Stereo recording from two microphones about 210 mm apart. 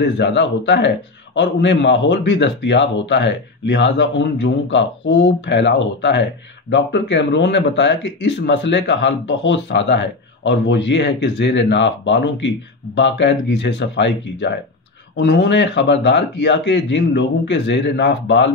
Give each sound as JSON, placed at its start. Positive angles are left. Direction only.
{"t": 0.0, "sound": "speech", "side_deg": 55}